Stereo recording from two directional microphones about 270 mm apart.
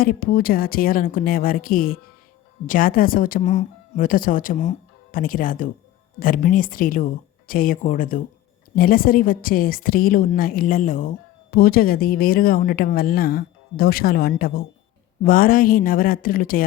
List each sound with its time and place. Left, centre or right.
0.0 s a woman's voice: left